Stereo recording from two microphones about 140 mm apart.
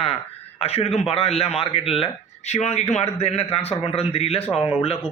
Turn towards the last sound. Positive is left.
turn(degrees=40)  # may be behind; listen again after turning